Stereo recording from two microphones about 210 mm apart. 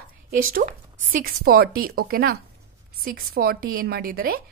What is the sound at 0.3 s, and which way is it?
A woman's voice, 40° right (ahead or behind).